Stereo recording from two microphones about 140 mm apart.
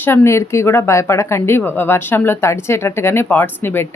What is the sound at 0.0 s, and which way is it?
Speech, 15° left (ahead or behind).